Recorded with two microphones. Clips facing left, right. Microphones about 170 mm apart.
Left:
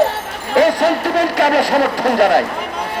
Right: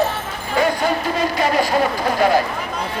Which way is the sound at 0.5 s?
80° left.